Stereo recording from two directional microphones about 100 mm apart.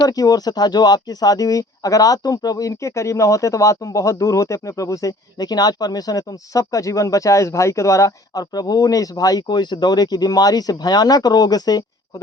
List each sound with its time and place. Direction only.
0.0 s speech: 40° left (ahead or behind)